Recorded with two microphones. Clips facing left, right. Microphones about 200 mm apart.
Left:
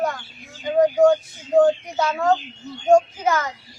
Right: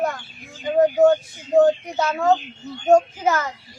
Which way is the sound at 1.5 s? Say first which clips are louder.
Even; 5° right (ahead or behind).